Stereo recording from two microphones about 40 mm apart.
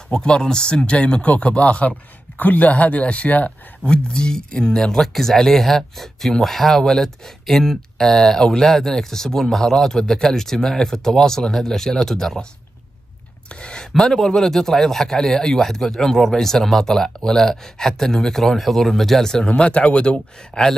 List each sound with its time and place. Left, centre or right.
0.1 s speech: centre; by 3.5 s left
3.8 s speech: left
13.5 s a sound: left
13.9 s speech: centre
19.4 s speech: left